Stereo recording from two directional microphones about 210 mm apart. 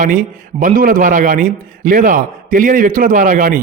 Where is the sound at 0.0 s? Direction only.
40° right (ahead or behind).